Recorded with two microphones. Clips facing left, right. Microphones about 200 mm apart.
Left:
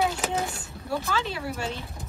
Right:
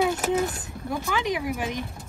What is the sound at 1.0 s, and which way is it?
Speech, 15° right (ahead or behind).